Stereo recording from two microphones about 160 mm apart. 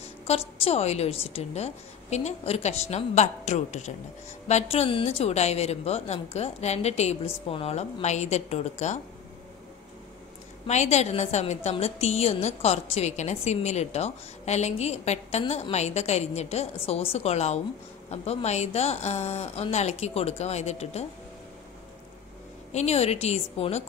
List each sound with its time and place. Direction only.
0.3 s a woman's voice: 40° left (ahead or behind)
10.7 s a woman's voice: 45° left (ahead or behind)
22.7 s a woman's voice: 45° left (ahead or behind)